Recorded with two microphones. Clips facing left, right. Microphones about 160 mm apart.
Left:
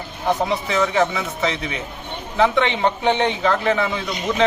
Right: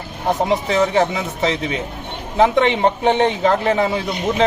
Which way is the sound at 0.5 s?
35° right (ahead or behind).